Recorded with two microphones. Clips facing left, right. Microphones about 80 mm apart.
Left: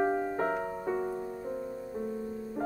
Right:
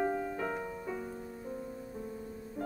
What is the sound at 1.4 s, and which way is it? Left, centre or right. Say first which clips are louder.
Music: left 5 dB; left.